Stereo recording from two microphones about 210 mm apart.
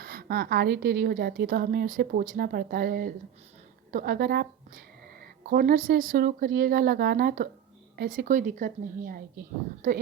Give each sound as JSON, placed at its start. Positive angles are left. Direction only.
{"t": 0.0, "sound": "a woman's voice", "side_deg": -45}